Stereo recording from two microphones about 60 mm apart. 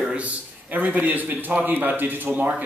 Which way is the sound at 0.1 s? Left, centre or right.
Right.